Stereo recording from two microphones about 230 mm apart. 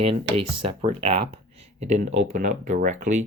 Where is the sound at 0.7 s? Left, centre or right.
Right.